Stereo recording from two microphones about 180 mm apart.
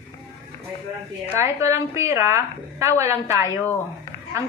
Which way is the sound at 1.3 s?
15° right (ahead or behind).